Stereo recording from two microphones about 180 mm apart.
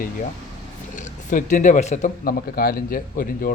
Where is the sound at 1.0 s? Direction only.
45° left (ahead or behind).